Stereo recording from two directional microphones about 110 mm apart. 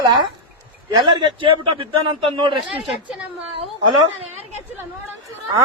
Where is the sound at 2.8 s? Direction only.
5° right (ahead or behind).